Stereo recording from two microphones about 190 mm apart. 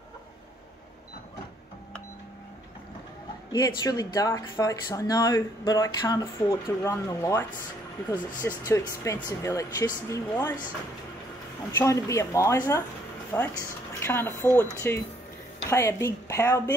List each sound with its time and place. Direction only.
3.5 s speech: 20° left (ahead or behind)
11.8 s speech: 15° left (ahead or behind)